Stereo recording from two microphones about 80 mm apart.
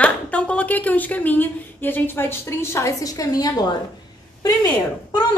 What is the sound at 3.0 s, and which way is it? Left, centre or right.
Speech, left.